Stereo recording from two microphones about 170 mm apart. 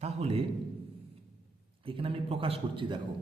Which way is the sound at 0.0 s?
40° right (ahead or behind).